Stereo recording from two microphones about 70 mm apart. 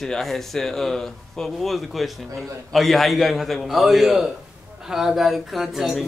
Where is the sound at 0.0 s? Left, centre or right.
Centre.